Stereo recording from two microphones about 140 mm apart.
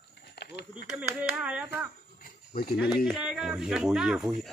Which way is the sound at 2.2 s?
90° left.